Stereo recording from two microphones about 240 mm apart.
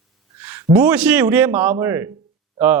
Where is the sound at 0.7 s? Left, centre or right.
Centre.